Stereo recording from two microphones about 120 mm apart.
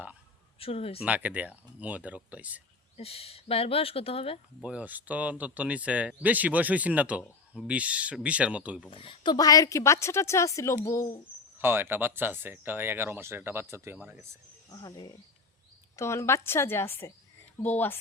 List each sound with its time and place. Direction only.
0.6 s speech: 55° left (ahead or behind)
1.0 s speech: 10° right (ahead or behind)
3.0 s speech: 55° left (ahead or behind)
4.6 s speech: 10° right (ahead or behind)
8.9 s a woman's voice: 45° left (ahead or behind); by 10.8 s 25° left (ahead or behind)
11.6 s speech: 20° right (ahead or behind)
14.7 s speech: 30° left (ahead or behind)
16.0 s a woman's voice: 25° left (ahead or behind)